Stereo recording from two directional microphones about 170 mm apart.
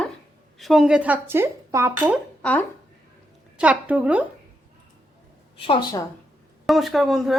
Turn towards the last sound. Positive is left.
turn(degrees=0)  # may be behind; listen again after turning